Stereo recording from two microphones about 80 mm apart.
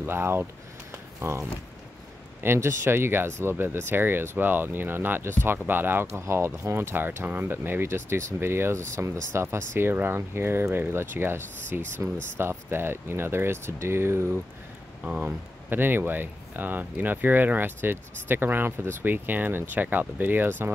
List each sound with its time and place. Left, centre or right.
0.0 s speech: right
15.0 s speech: centre